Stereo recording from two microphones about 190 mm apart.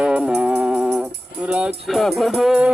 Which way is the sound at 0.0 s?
5° right (ahead or behind).